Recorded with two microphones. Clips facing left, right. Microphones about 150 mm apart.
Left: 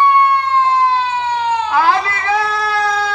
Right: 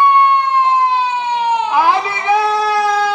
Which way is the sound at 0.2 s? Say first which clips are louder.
Right 1 dB; 15° right (ahead or behind).